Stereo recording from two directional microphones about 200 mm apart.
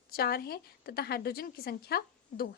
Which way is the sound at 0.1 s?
50° left (ahead or behind).